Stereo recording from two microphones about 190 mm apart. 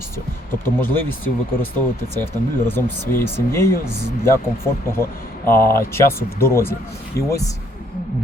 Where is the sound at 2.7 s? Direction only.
10° left (ahead or behind).